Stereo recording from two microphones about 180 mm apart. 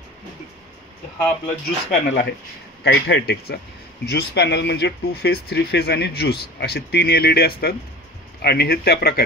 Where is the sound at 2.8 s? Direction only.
70° left (ahead or behind).